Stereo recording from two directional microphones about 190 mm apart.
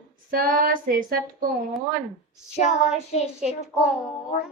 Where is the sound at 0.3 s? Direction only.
50° right (ahead or behind).